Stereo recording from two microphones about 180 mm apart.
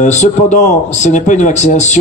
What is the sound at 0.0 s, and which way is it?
A man's voice, 40° left (ahead or behind).